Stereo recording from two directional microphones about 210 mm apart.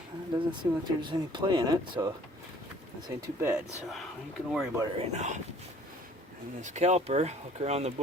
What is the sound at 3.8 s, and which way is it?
Speech, centre (ahead or behind).